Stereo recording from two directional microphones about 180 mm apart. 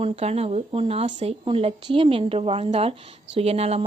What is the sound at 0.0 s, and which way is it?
A woman's voice, 35° right (ahead or behind).